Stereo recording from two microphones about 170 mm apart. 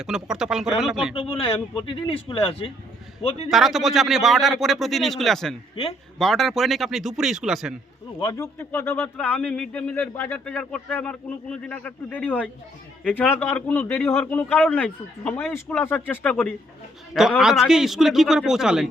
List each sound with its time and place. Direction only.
0.0 s speech: 5° right (ahead or behind)
1.1 s a man's voice: 35° left (ahead or behind)
3.5 s speech: centre (ahead or behind)
8.2 s speech: 20° left (ahead or behind)
17.2 s speech: 5° right (ahead or behind)